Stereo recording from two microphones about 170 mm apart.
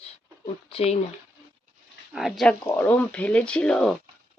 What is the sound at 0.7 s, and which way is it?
Speech, 35° left (ahead or behind).